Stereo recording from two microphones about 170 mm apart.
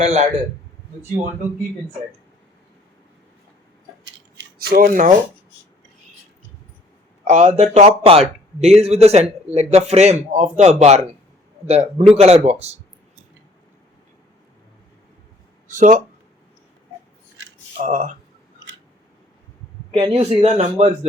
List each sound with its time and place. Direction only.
0.0 s speech: 45° right (ahead or behind)
4.0 s scissors: 80° right; by 5.1 s 50° right (ahead or behind)
7.3 s a man's voice: 45° right (ahead or behind)
15.6 s speech: 50° right (ahead or behind)
17.8 s speech: 50° right (ahead or behind)
20.0 s a man's voice: 35° right (ahead or behind)